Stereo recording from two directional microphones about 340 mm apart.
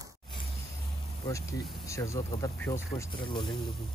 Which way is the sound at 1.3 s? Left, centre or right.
Centre.